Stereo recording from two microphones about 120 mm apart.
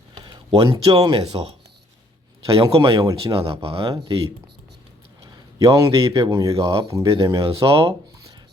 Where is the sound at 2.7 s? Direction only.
45° right (ahead or behind).